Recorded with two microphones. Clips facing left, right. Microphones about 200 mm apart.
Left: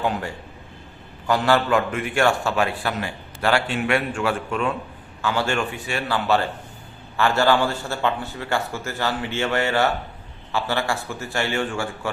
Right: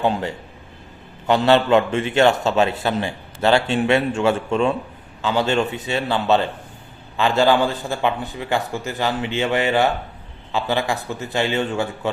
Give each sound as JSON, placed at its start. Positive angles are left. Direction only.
{"t": 0.0, "sound": "a man's voice", "side_deg": -25}